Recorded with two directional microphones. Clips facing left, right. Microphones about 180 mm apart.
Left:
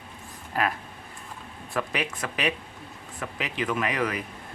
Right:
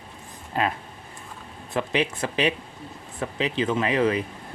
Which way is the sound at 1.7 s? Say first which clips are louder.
Right 5 dB; 25° right (ahead or behind).